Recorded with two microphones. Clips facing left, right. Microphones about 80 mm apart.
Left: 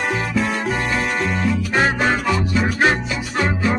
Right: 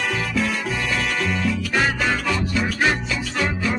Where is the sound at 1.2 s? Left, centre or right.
Left.